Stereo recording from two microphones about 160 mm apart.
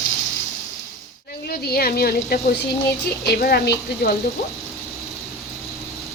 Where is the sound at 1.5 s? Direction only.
70° left (ahead or behind).